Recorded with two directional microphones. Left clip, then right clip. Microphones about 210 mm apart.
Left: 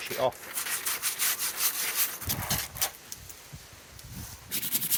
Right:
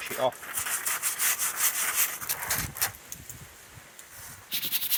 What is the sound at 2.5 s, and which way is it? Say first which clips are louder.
Vehicle: right 1 dB; centre (ahead or behind).